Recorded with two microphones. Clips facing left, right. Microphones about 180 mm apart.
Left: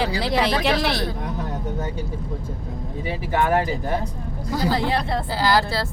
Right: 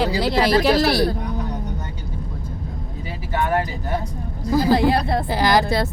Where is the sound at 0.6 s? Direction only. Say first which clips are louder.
Right 5 dB; 5° right (ahead or behind).